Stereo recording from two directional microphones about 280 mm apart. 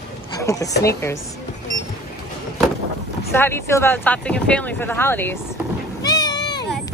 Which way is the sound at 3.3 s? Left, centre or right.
Centre.